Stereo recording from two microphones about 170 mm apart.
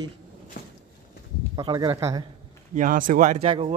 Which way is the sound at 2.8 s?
55° right (ahead or behind).